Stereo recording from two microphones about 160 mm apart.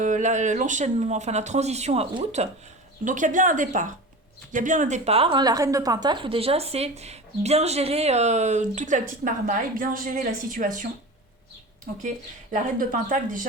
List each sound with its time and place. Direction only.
0.0 s a woman's voice: 50° right (ahead or behind)
3.0 s a woman's voice: 50° right (ahead or behind)
12.0 s speech: 55° right (ahead or behind)